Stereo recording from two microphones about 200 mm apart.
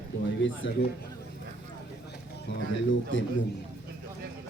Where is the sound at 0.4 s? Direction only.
70° left (ahead or behind).